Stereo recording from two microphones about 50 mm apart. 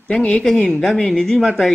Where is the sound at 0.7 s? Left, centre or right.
Centre.